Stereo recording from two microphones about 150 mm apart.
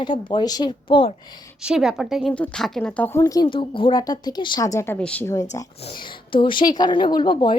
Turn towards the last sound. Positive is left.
turn(degrees=30)  # may be behind; listen again after turning